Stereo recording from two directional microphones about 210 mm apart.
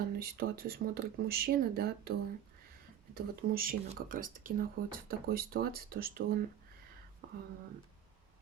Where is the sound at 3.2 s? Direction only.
45° right (ahead or behind).